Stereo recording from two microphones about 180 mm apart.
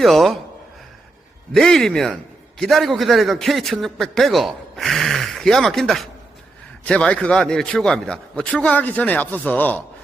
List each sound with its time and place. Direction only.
0.0 s a man's voice: centre (ahead or behind)
1.5 s a man's voice: 5° left (ahead or behind)